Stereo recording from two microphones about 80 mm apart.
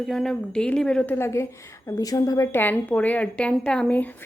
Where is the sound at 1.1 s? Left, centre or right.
Left.